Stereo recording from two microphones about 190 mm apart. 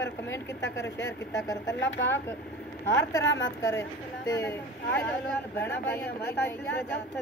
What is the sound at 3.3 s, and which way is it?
Speech, 80° left.